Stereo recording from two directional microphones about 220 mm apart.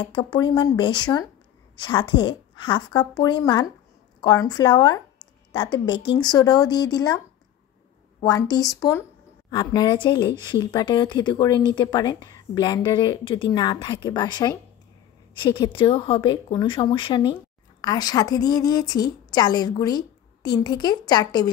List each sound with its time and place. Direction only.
0.0 s a woman's voice: 20° left (ahead or behind)
8.2 s a woman's voice: 20° left (ahead or behind)